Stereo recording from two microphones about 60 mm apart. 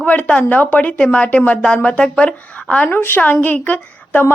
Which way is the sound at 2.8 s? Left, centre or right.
Left.